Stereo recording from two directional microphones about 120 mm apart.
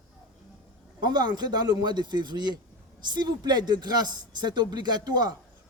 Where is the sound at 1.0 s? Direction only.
35° right (ahead or behind).